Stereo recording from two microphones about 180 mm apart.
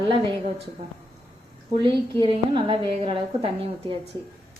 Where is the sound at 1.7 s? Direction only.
25° right (ahead or behind).